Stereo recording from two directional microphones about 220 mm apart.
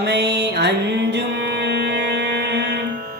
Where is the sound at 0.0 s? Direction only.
50° right (ahead or behind).